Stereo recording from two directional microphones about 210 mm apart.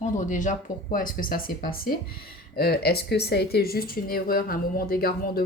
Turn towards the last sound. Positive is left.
turn(degrees=45)  # may be behind; listen again after turning